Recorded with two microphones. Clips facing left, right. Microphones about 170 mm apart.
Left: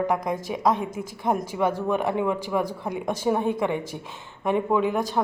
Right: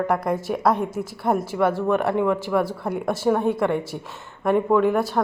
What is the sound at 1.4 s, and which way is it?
Speech, 15° left (ahead or behind).